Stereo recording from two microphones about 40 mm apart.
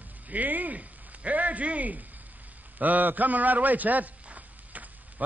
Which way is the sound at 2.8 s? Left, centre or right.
Right.